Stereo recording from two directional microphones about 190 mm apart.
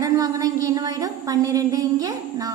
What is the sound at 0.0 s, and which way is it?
A woman's voice, 20° right (ahead or behind).